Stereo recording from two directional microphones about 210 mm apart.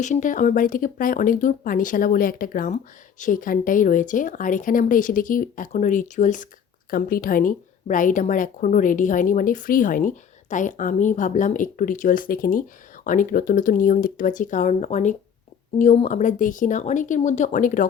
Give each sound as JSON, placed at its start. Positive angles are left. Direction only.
{"t": 0.0, "sound": "speech", "side_deg": 35}